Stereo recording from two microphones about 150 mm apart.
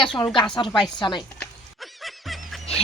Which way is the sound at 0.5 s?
30° left (ahead or behind).